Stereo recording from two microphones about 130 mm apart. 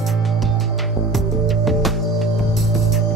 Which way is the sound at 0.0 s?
Centre (ahead or behind).